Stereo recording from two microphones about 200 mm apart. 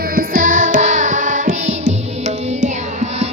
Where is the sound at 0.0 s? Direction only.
45° right (ahead or behind).